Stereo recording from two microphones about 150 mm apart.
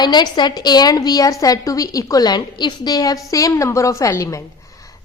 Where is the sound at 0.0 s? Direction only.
30° left (ahead or behind).